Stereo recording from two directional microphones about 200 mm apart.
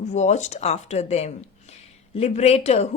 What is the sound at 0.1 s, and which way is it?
Speech, 35° left (ahead or behind).